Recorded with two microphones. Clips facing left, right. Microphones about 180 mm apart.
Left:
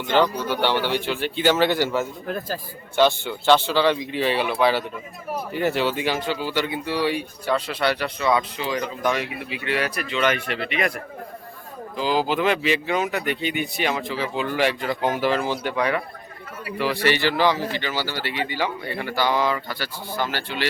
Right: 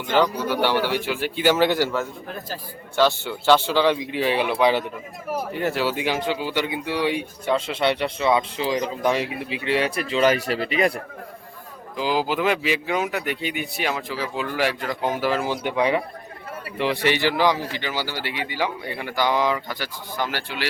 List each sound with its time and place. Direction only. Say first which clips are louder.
0.1 s speech: even; 10° right (ahead or behind)
3.1 s speech: even; 10° right (ahead or behind)
5.5 s speech: left 3 dB; centre (ahead or behind); by 11.0 s 35° right (ahead or behind)
11.9 s speech: left 1 dB; 10° right (ahead or behind)
15.6 s speech: right 2 dB; 20° right (ahead or behind)